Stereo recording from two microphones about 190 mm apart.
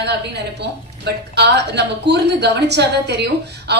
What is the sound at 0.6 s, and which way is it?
A woman's voice, 60° right (ahead or behind).